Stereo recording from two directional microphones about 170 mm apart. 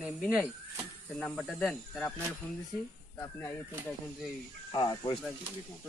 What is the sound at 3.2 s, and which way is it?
Speech, 15° left (ahead or behind).